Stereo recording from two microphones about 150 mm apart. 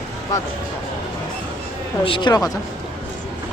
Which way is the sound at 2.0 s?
35° left (ahead or behind).